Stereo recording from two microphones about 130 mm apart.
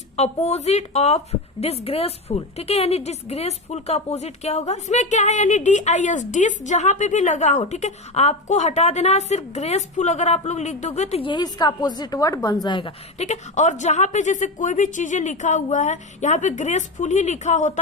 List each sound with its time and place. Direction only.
0.2 s a woman's voice: 55° left (ahead or behind)
11.2 s a woman's voice: 35° left (ahead or behind)
12.6 s a woman's voice: 35° left (ahead or behind)
13.1 s a woman's voice: 60° left (ahead or behind)